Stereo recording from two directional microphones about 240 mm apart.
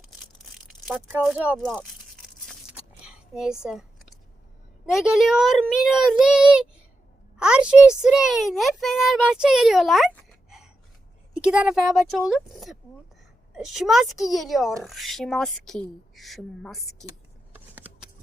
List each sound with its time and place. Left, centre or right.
0.7 s speech: centre
2.5 s a sound: centre
4.9 s a child's voice: centre
10.5 s gasp: centre
11.3 s a woman's voice: centre
17.7 s a sound: centre